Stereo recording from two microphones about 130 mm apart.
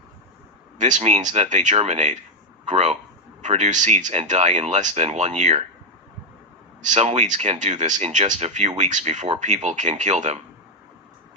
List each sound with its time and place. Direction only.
0.8 s speech: 70° right (ahead or behind)
6.8 s speech: 60° right (ahead or behind)